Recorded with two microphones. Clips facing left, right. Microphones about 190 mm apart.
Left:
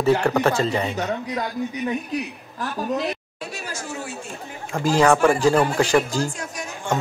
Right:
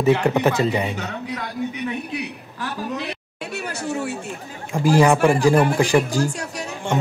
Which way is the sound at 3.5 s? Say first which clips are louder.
Right 7 dB; 65° right (ahead or behind).